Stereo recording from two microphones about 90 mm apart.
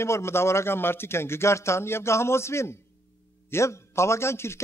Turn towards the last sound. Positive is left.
turn(degrees=30)  # may be behind; listen again after turning